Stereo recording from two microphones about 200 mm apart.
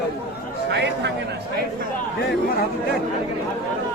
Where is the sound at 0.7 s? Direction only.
55° right (ahead or behind).